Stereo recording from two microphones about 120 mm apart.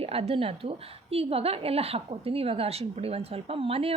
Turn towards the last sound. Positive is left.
turn(degrees=-55)  # may be behind; listen again after turning